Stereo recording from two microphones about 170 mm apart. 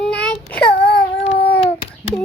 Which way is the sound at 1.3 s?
75° left (ahead or behind).